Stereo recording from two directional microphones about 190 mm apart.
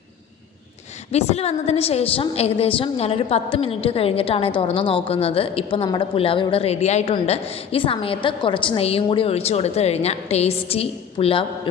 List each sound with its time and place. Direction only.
1.1 s a woman's voice: 35° left (ahead or behind)